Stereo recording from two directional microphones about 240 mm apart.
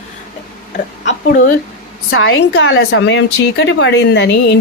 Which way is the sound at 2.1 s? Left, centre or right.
Left.